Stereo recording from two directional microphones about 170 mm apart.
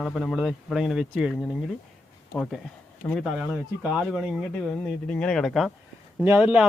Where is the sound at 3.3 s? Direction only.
5° right (ahead or behind).